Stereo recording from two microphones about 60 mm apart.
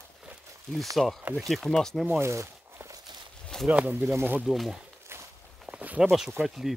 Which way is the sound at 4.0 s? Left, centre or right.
Right.